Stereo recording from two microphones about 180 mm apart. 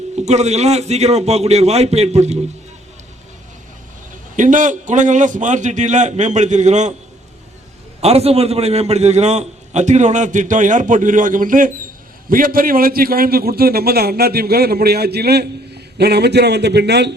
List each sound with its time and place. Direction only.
0.2 s a man's voice: 40° right (ahead or behind)
4.4 s a man's voice: 45° right (ahead or behind)
8.0 s a man's voice: 35° right (ahead or behind); by 17.2 s 70° right (ahead or behind)